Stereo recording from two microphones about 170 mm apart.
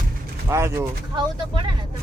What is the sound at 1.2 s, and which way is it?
Speech, 30° right (ahead or behind).